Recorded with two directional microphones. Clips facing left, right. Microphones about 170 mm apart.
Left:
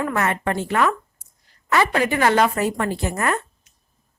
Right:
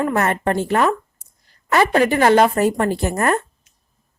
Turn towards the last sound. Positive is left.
turn(degrees=-45)  # may be behind; listen again after turning